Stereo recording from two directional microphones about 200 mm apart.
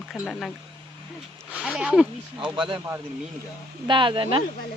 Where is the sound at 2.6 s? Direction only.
25° right (ahead or behind).